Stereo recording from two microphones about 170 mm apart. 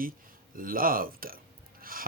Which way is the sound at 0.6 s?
55° right (ahead or behind).